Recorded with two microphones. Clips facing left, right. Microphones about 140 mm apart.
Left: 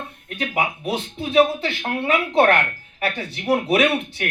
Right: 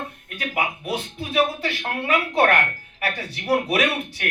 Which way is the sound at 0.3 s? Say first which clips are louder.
Left 2 dB; 25° left (ahead or behind).